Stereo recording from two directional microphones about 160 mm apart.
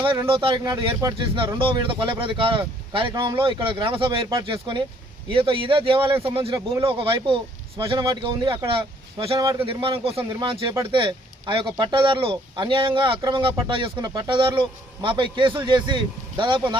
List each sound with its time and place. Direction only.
0.3 s speech: 30° right (ahead or behind)